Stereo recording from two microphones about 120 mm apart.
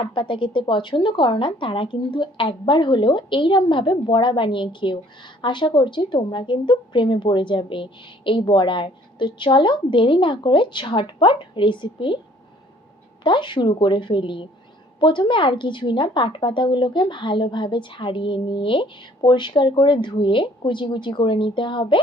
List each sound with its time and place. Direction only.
0.0 s a woman's voice: 45° left (ahead or behind)
13.2 s a woman's voice: 40° left (ahead or behind)